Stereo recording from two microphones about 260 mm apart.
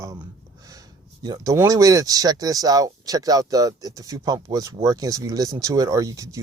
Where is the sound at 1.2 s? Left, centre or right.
Centre.